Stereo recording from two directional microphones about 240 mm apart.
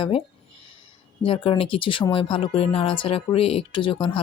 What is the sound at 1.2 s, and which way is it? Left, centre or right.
Speech, left.